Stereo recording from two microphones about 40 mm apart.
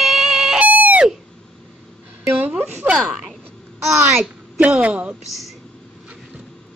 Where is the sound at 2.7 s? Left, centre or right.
Right.